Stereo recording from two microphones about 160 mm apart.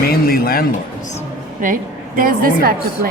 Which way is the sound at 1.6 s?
60° right (ahead or behind).